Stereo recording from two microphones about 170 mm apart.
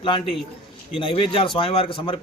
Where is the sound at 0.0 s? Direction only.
30° left (ahead or behind).